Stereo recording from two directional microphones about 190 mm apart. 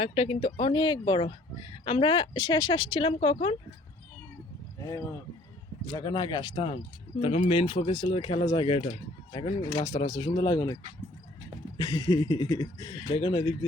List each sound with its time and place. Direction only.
0.0 s speech: 30° left (ahead or behind)
4.8 s speech: 15° left (ahead or behind); by 10.1 s 35° left (ahead or behind)
10.1 s speech: 20° left (ahead or behind)
11.8 s speech: 20° left (ahead or behind)